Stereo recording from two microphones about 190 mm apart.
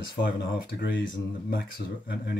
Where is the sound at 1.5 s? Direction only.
55° left (ahead or behind).